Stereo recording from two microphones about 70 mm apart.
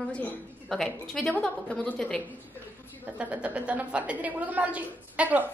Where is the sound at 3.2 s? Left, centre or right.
Centre.